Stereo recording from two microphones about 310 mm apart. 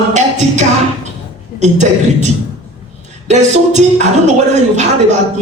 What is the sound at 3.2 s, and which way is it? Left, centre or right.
Speech, right.